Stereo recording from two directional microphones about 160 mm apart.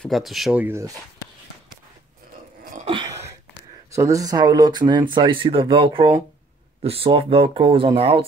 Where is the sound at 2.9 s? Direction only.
30° right (ahead or behind).